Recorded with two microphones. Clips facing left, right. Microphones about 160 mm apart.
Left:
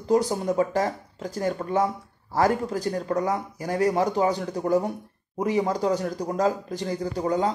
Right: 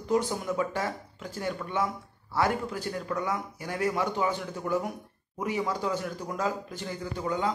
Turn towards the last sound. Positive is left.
turn(degrees=35)  # may be behind; listen again after turning